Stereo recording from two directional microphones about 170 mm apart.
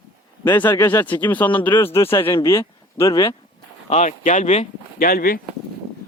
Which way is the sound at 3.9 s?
45° left (ahead or behind).